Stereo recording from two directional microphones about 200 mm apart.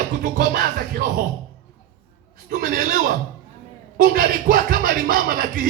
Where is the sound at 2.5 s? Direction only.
45° right (ahead or behind).